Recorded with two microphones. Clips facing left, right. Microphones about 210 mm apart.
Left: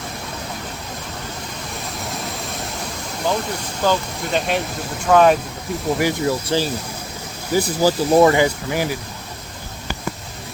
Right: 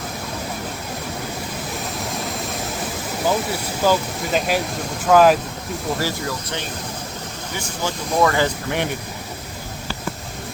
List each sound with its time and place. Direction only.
3.2 s speech: 5° right (ahead or behind)
6.0 s speech: 20° left (ahead or behind)
6.5 s speech: 30° left (ahead or behind)
8.4 s speech: 5° left (ahead or behind)